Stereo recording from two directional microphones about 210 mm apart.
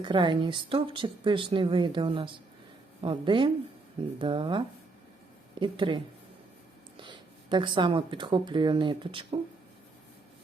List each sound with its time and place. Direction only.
0.0 s speech: 20° right (ahead or behind)